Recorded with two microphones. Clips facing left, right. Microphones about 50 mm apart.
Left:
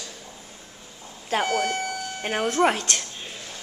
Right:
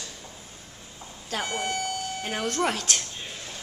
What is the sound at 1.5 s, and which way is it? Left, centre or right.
Speech, left.